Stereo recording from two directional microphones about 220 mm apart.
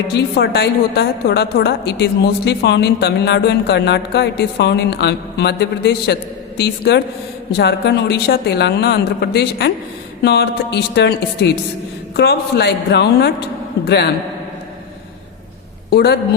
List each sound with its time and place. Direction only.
0.1 s a woman's voice: 50° left (ahead or behind)
15.9 s a woman's voice: 45° left (ahead or behind)